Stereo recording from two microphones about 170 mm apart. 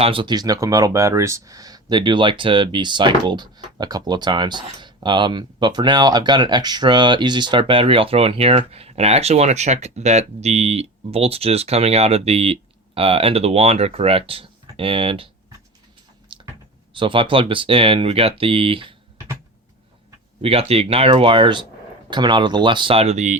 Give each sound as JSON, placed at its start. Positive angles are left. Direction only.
{"t": 0.0, "sound": "speech", "side_deg": -30}
{"t": 16.9, "sound": "speech", "side_deg": -30}
{"t": 20.4, "sound": "speech", "side_deg": -35}